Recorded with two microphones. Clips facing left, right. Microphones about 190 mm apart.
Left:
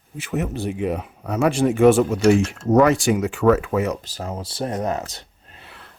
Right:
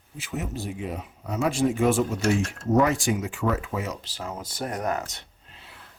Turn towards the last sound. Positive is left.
turn(degrees=65)  # may be behind; listen again after turning